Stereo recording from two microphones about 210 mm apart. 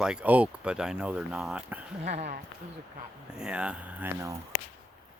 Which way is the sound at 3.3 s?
5° right (ahead or behind).